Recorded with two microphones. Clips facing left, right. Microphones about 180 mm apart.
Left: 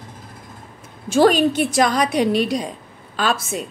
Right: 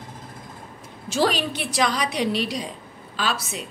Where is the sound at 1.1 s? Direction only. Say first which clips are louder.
Left 8 dB; 50° left (ahead or behind).